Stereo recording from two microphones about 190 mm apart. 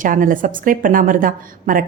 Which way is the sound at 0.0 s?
45° right (ahead or behind).